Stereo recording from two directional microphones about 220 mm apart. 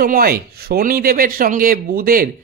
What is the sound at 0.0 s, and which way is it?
Speech, 40° right (ahead or behind).